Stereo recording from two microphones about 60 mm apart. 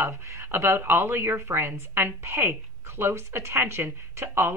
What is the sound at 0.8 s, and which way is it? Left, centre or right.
A woman's voice, right.